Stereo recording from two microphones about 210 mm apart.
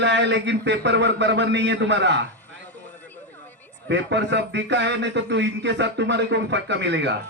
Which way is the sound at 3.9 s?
55° right (ahead or behind).